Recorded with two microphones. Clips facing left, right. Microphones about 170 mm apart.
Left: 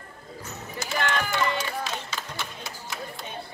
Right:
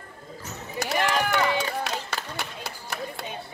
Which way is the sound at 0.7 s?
65° right (ahead or behind).